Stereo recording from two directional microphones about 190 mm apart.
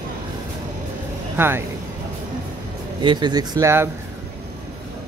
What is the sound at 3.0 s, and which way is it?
Speech, 25° right (ahead or behind).